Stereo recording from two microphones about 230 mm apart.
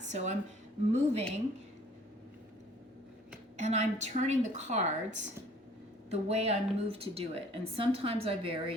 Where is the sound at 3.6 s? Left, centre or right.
Right.